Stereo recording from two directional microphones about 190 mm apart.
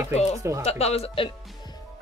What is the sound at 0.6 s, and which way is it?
Speech, 35° left (ahead or behind).